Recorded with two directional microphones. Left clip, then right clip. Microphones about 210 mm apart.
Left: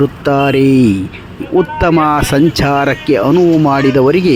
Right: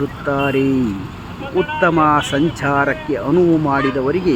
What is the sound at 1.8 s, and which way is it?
Speech, 30° left (ahead or behind).